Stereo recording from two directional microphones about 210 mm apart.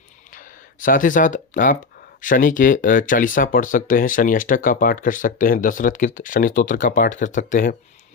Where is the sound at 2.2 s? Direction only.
40° left (ahead or behind).